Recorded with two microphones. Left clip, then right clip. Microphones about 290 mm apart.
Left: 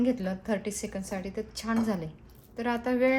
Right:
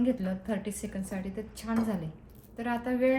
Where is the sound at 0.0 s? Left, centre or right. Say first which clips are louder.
Left 2 dB; centre.